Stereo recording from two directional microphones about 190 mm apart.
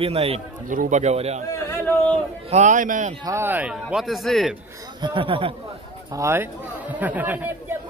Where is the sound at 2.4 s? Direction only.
40° right (ahead or behind).